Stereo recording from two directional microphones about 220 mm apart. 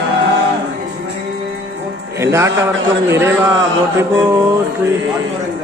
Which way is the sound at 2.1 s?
10° right (ahead or behind).